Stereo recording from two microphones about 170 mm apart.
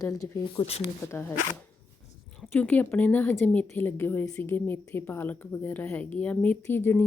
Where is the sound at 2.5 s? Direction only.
10° left (ahead or behind).